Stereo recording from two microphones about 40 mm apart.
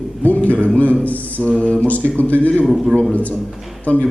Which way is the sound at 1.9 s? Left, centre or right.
Left.